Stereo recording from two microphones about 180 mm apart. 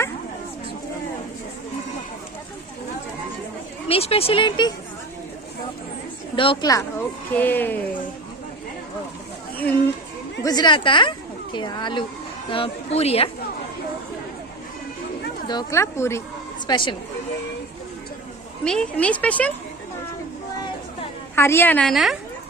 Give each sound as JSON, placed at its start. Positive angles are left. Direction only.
{"t": 3.8, "sound": "a woman's voice", "side_deg": 35}
{"t": 6.3, "sound": "a woman's voice", "side_deg": 30}
{"t": 7.3, "sound": "a woman's voice", "side_deg": 10}
{"t": 10.4, "sound": "a woman's voice", "side_deg": 25}
{"t": 15.4, "sound": "a woman's voice", "side_deg": 20}
{"t": 16.6, "sound": "a woman's voice", "side_deg": 25}
{"t": 18.6, "sound": "a woman's voice", "side_deg": 5}
{"t": 21.3, "sound": "a woman's voice", "side_deg": 15}